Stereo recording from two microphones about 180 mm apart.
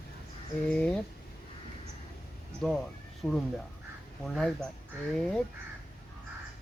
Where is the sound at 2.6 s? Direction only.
5° left (ahead or behind).